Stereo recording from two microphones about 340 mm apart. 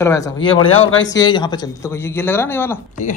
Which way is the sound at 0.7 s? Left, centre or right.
Left.